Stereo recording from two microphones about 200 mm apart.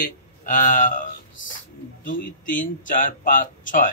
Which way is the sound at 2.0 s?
40° left (ahead or behind).